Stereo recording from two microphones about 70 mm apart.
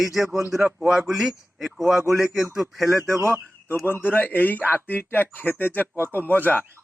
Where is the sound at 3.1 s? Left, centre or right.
Right.